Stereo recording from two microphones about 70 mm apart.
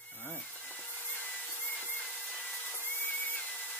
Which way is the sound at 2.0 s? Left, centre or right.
Centre.